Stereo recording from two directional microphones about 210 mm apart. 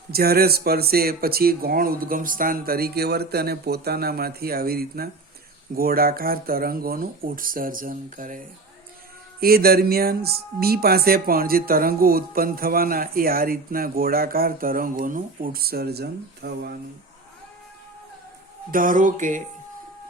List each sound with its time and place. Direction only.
0.1 s speech: 45° right (ahead or behind)
9.4 s speech: 45° right (ahead or behind)
18.7 s music: 40° right (ahead or behind)